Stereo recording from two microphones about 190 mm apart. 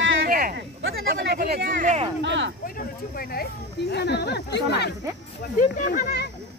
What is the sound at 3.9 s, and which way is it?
Speech, 60° left (ahead or behind).